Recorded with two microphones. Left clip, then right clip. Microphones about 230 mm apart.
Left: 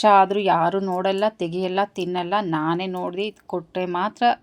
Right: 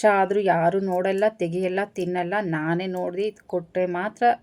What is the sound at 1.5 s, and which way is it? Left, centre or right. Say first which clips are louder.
Speech: left 2 dB; left.